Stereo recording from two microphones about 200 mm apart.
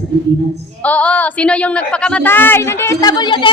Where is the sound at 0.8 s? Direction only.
5° left (ahead or behind); by 3.5 s 20° left (ahead or behind).